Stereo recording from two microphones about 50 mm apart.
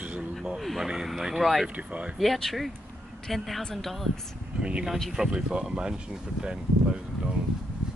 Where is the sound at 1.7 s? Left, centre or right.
Right.